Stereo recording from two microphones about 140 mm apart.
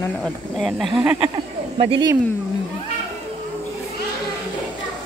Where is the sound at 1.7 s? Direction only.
45° right (ahead or behind).